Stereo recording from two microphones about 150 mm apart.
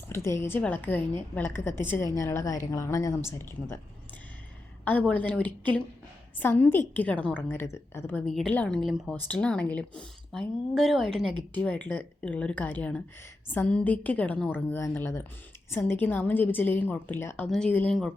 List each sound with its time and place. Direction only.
0.1 s a woman's voice: 15° left (ahead or behind)
4.9 s a woman's voice: 10° left (ahead or behind)
8.3 s a woman's voice: 5° left (ahead or behind)